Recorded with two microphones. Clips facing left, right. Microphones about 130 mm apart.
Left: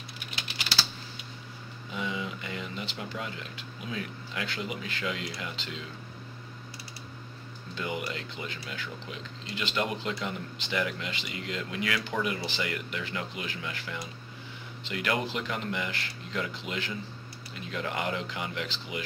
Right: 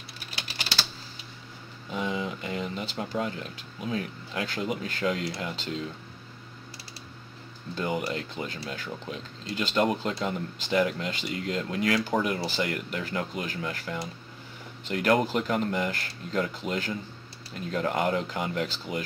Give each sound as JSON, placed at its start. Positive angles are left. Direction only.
{"t": 1.9, "sound": "speech", "side_deg": -40}
{"t": 7.7, "sound": "speech", "side_deg": -40}